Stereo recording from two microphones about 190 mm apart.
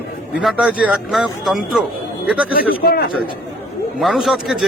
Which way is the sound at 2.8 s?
55° left (ahead or behind).